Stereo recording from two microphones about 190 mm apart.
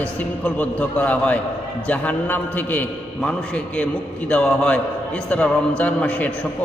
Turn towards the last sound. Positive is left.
turn(degrees=5)  # may be behind; listen again after turning